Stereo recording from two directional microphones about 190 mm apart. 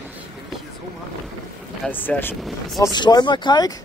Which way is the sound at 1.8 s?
10° left (ahead or behind).